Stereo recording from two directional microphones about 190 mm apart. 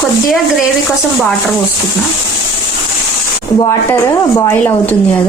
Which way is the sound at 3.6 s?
20° left (ahead or behind).